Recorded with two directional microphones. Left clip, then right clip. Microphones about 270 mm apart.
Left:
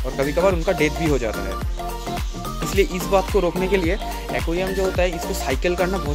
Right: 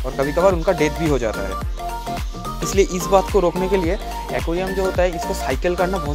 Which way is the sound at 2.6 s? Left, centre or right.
Centre.